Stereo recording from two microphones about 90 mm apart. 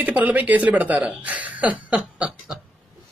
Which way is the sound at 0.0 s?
20° right (ahead or behind).